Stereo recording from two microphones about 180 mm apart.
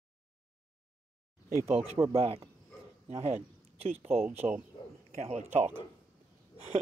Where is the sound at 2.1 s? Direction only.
35° right (ahead or behind).